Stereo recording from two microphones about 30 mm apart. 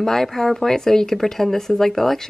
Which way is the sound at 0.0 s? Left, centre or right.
Centre.